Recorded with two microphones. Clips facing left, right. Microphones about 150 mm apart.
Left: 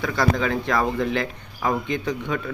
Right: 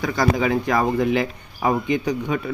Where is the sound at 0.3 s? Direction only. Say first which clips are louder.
Right 3 dB; 10° right (ahead or behind).